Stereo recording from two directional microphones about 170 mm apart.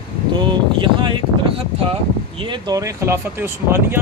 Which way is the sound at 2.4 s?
25° right (ahead or behind).